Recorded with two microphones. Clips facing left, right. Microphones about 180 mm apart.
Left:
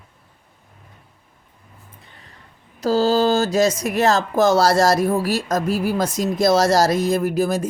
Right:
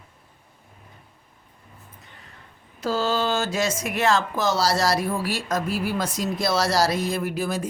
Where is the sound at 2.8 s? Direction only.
35° left (ahead or behind).